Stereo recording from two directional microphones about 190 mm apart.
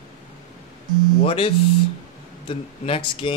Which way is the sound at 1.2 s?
30° left (ahead or behind).